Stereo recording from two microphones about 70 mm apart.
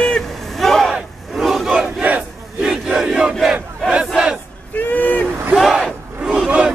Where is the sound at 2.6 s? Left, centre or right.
Centre.